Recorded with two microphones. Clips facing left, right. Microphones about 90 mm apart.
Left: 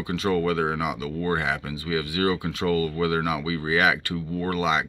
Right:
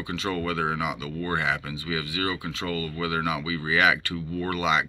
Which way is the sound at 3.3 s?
35° left (ahead or behind).